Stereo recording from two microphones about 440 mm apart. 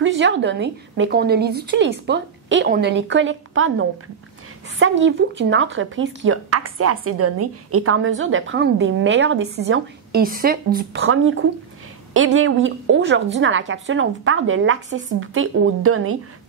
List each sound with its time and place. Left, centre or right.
0.0 s speech: right